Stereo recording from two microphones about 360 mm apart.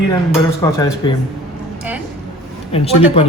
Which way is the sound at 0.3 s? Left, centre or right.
Centre.